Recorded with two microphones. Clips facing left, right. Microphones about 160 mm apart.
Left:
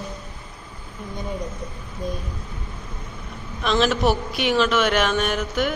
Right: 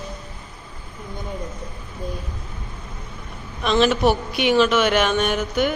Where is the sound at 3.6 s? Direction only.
Centre (ahead or behind).